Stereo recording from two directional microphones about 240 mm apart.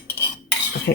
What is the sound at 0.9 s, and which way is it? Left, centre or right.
Speech, left.